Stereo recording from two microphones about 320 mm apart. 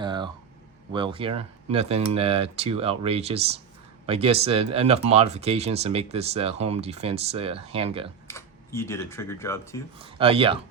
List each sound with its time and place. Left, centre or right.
0.0 s a sound: centre
0.9 s speech: centre
8.3 s speech: centre
10.0 s speech: centre